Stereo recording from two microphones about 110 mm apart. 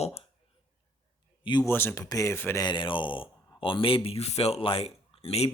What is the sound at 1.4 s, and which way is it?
Speech, 40° left (ahead or behind).